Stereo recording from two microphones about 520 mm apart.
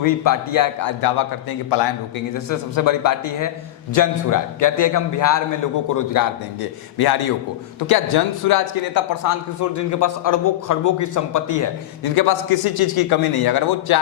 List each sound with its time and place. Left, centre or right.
0.0 s a man's voice: left
2.5 s a man's voice: left